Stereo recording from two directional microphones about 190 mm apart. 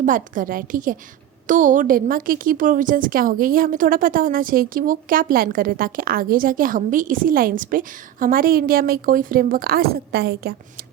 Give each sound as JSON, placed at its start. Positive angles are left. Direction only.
{"t": 0.0, "sound": "a woman's voice", "side_deg": -45}